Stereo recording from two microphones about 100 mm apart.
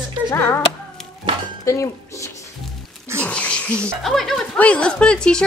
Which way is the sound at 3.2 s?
10° left (ahead or behind).